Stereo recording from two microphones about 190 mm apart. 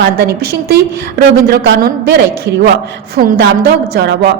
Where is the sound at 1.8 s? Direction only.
55° right (ahead or behind).